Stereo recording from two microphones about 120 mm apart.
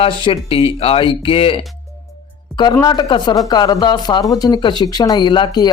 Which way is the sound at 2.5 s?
35° left (ahead or behind).